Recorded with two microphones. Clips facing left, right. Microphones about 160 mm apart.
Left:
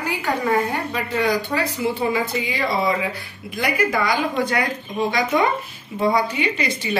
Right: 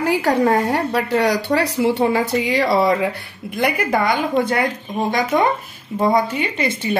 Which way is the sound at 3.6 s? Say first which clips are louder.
Right 2 dB; 55° right (ahead or behind).